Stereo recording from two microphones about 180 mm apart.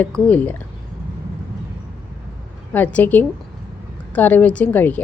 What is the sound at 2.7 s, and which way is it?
A woman's voice, 10° left (ahead or behind).